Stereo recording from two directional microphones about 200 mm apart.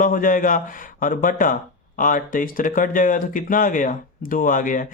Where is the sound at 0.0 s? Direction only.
40° left (ahead or behind).